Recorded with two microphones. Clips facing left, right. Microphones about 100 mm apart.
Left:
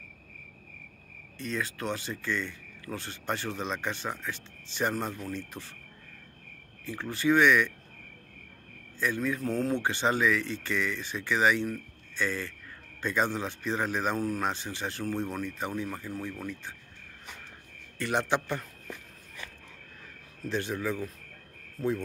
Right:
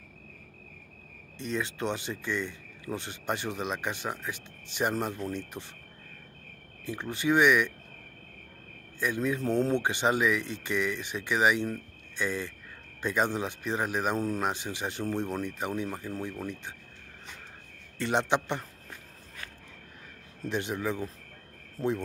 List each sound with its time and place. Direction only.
1.4 s speech: 20° right (ahead or behind)
6.8 s speech: 20° right (ahead or behind)
9.0 s speech: 15° right (ahead or behind)
17.9 s speech: 25° right (ahead or behind)
20.4 s speech: 15° right (ahead or behind)
21.7 s cricket: 20° right (ahead or behind)